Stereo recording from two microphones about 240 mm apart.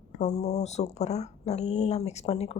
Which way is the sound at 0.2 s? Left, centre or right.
Left.